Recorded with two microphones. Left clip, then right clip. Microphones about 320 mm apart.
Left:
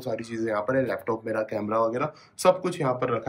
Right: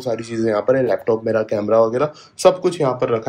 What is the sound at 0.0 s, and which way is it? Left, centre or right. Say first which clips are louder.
Speech: right 9 dB; centre.